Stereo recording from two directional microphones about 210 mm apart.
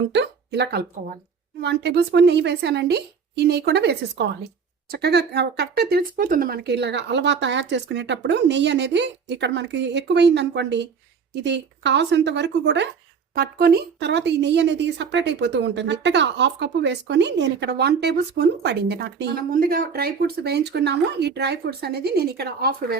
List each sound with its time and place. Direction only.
0.1 s a woman's voice: 55° right (ahead or behind)